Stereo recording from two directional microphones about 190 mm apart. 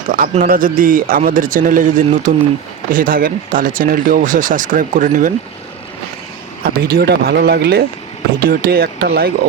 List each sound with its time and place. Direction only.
0.1 s speech: 50° right (ahead or behind)
6.7 s speech: 55° right (ahead or behind)